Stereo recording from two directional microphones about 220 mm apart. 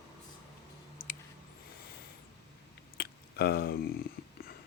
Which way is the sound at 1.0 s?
40° left (ahead or behind).